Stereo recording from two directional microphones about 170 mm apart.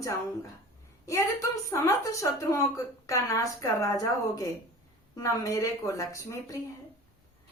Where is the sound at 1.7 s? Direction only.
20° left (ahead or behind).